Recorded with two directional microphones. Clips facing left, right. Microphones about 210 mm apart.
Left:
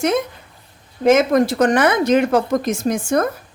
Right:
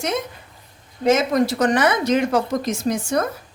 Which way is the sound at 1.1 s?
50° left (ahead or behind).